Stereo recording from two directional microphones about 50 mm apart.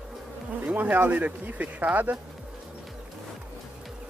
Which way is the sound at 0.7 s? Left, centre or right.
Right.